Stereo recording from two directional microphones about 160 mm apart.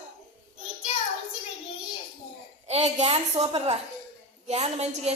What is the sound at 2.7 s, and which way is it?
A woman's voice, 45° right (ahead or behind).